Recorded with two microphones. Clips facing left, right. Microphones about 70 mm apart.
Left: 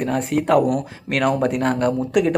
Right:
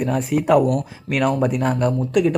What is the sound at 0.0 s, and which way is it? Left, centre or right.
Speech, centre.